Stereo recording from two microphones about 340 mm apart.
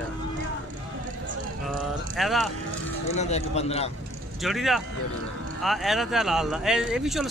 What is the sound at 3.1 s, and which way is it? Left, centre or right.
Speech, centre.